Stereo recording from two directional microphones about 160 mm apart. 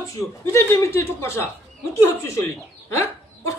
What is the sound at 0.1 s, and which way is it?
Speech, 15° left (ahead or behind).